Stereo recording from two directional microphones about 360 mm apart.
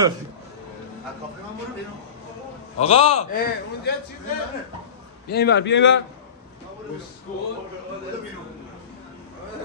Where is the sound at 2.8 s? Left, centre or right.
Centre.